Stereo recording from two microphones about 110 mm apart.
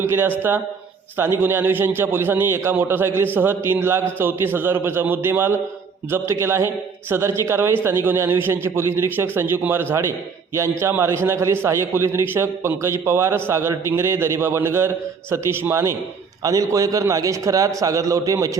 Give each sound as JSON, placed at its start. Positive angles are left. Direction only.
{"t": 0.0, "sound": "a man's voice", "side_deg": -20}